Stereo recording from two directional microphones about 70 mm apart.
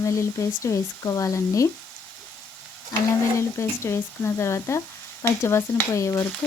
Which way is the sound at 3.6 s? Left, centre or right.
Left.